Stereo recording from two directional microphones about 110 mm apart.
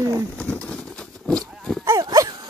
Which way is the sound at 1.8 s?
35° right (ahead or behind).